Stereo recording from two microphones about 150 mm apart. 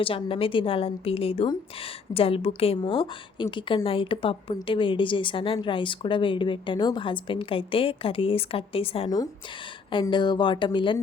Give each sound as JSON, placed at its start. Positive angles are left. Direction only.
{"t": 0.0, "sound": "a woman's voice", "side_deg": 35}
{"t": 9.0, "sound": "a woman's voice", "side_deg": 25}